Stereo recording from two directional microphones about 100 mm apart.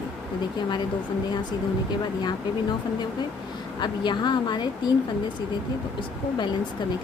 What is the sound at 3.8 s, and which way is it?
Speech, 50° left (ahead or behind).